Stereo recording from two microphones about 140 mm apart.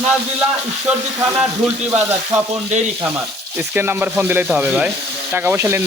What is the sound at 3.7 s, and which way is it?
Speech, 15° right (ahead or behind).